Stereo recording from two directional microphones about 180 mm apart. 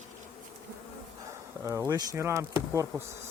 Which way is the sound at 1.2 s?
15° right (ahead or behind).